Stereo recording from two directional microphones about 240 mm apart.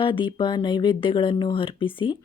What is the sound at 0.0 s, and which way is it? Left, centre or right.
Speech, centre.